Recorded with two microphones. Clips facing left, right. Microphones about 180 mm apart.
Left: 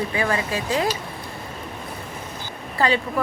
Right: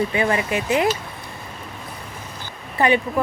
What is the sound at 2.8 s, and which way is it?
Speech, 20° right (ahead or behind).